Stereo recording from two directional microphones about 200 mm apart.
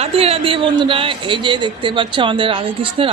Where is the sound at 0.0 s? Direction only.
30° right (ahead or behind).